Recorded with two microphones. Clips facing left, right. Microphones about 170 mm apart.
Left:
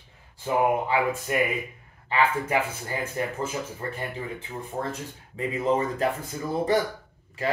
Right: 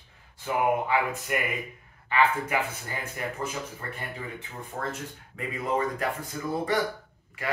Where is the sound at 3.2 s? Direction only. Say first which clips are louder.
Left 2 dB; 30° left (ahead or behind).